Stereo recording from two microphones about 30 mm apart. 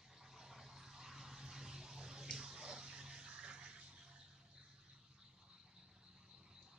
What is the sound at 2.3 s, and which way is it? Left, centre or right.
Bathtub, right.